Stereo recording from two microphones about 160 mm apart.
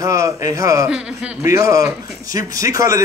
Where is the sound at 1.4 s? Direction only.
20° right (ahead or behind).